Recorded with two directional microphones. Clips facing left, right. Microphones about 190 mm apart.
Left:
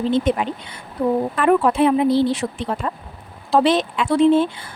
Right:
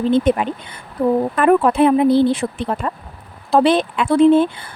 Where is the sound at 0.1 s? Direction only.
55° right (ahead or behind).